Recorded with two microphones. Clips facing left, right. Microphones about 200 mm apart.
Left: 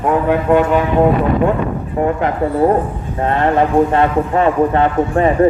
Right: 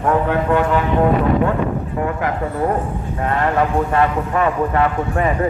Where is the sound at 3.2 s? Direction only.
25° left (ahead or behind).